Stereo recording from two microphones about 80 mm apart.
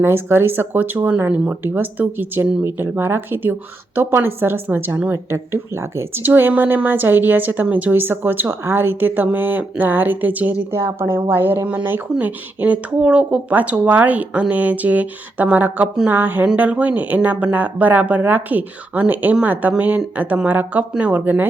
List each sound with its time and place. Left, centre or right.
0.0 s a woman's voice: right
10.7 s a woman's voice: right